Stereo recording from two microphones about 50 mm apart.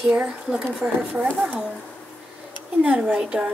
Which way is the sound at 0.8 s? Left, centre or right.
Right.